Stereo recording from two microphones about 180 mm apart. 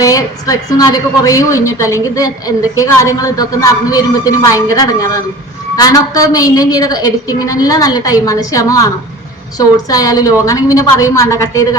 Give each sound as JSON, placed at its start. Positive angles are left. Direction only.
{"t": 0.0, "sound": "a woman's voice", "side_deg": 20}